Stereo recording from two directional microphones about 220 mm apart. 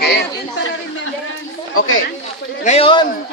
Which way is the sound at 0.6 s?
65° left (ahead or behind).